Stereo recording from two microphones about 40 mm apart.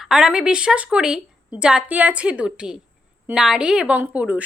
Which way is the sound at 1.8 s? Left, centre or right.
Right.